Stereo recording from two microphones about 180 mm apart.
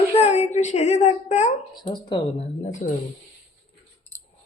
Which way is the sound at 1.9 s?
25° left (ahead or behind).